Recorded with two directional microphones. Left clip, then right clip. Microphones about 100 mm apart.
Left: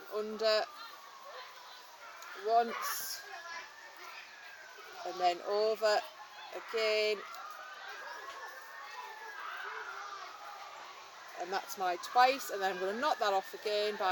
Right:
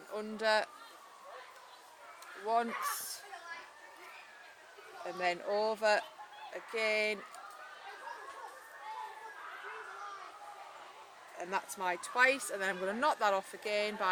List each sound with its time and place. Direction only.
0.1 s speech: 35° right (ahead or behind)
2.5 s speech: 35° right (ahead or behind)
5.2 s speech: 30° right (ahead or behind)
11.3 s speech: 35° right (ahead or behind)